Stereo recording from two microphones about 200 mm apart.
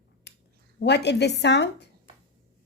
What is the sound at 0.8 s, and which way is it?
A woman's voice, 60° left (ahead or behind).